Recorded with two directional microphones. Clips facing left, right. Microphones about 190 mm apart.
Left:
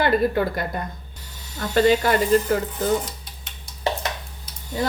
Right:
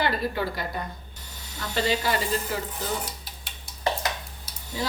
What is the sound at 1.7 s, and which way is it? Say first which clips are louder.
Speech: left 8 dB; 50° left (ahead or behind).